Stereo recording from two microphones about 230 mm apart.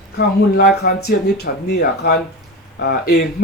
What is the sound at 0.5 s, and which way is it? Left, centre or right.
Speech, left.